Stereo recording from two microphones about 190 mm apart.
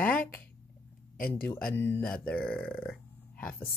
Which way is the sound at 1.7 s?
10° left (ahead or behind).